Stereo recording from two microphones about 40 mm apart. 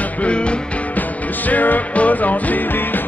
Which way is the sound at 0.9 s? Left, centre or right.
Left.